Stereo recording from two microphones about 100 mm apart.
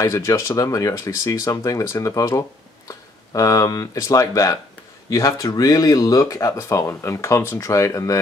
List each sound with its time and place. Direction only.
0.0 s speech: 30° left (ahead or behind)